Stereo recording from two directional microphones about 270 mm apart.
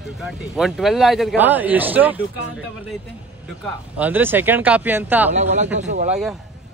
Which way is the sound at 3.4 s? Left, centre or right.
Centre.